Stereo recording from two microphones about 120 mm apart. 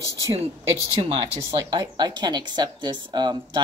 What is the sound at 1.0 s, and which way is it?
Speech, 50° right (ahead or behind).